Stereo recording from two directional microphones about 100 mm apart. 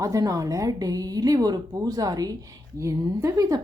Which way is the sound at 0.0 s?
35° right (ahead or behind).